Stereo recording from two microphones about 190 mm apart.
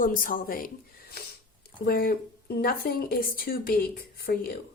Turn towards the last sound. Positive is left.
turn(degrees=50)  # may be behind; listen again after turning